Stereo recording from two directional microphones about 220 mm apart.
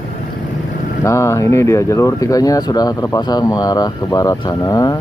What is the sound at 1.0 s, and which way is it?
Speech, 15° left (ahead or behind).